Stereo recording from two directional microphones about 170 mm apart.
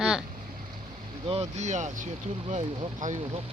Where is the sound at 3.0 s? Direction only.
45° right (ahead or behind).